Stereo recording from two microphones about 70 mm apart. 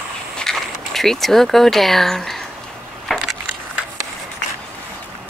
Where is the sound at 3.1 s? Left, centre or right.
Centre.